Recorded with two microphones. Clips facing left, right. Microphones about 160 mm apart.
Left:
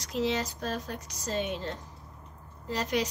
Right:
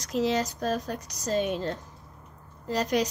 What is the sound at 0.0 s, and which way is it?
Speech, 40° right (ahead or behind).